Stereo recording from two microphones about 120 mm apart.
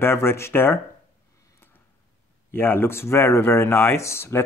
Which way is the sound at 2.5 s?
20° left (ahead or behind).